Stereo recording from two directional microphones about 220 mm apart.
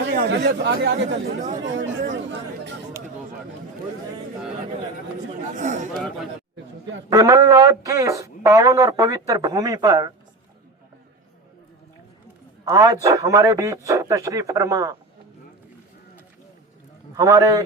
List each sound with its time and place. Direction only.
0.0 s speech: 45° right (ahead or behind)
5.5 s a man's voice: 35° right (ahead or behind)
7.1 s a man's voice: 15° right (ahead or behind)
12.6 s a man's voice: 15° right (ahead or behind)
17.2 s a man's voice: 15° right (ahead or behind)